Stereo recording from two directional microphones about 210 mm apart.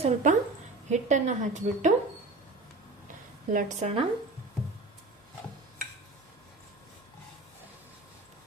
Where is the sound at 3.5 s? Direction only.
35° right (ahead or behind).